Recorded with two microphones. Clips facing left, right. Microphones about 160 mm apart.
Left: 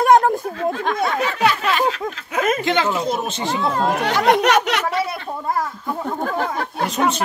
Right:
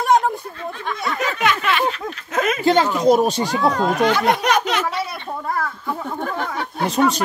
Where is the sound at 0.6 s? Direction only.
85° left.